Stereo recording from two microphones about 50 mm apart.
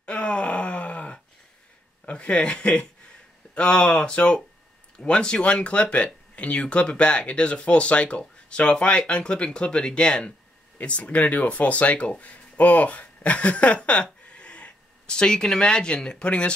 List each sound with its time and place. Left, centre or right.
0.0 s groan: left
2.0 s speech: left